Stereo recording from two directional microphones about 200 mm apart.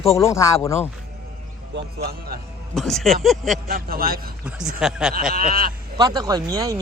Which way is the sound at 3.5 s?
45° right (ahead or behind).